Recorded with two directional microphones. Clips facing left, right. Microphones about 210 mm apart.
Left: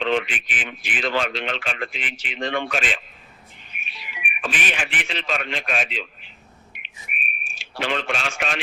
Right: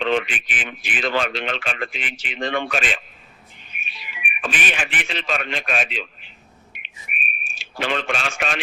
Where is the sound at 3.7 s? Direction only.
55° right (ahead or behind).